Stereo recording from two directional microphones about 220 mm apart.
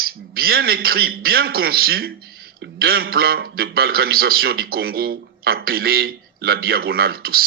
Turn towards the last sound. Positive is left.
turn(degrees=-45)  # may be behind; listen again after turning